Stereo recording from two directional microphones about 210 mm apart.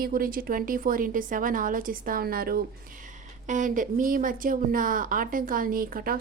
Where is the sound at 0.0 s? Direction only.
45° right (ahead or behind).